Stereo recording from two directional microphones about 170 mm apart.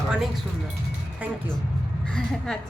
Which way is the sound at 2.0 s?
5° left (ahead or behind).